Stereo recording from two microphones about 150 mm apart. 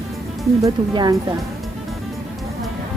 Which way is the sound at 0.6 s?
25° right (ahead or behind).